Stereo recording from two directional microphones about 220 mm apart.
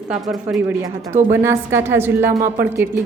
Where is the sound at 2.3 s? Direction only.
40° right (ahead or behind).